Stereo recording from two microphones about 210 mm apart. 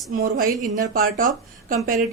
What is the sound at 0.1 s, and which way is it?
Speech, 40° right (ahead or behind).